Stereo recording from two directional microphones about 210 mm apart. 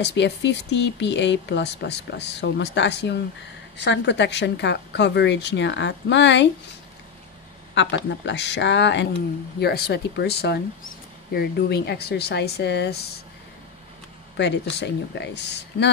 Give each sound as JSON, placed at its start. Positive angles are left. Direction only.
{"t": 0.0, "sound": "speech", "side_deg": 55}
{"t": 7.7, "sound": "speech", "side_deg": 55}
{"t": 14.3, "sound": "speech", "side_deg": 55}